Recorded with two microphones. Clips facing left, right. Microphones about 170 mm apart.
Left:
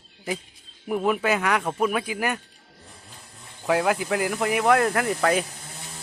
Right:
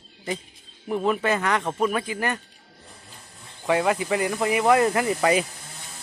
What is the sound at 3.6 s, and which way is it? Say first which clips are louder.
Speech: even; centre (ahead or behind).